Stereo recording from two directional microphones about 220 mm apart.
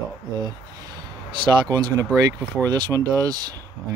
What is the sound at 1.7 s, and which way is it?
Speech, 15° right (ahead or behind).